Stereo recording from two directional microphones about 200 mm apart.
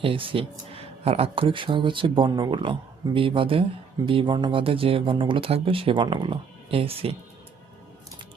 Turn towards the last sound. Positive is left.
turn(degrees=-30)  # may be behind; listen again after turning